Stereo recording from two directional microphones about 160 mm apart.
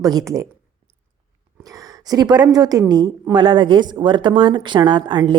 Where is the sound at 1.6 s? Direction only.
25° right (ahead or behind).